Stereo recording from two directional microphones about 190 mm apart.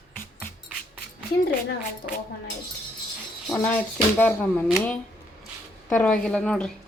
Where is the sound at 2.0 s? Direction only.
55° left (ahead or behind).